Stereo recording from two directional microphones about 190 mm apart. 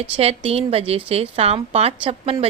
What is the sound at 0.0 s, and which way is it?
Speech, 30° right (ahead or behind).